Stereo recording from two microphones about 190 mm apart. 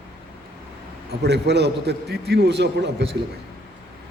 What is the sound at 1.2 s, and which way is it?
A man's voice, 65° right (ahead or behind).